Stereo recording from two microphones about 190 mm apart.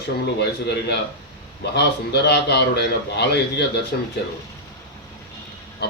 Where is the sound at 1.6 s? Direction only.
60° left (ahead or behind).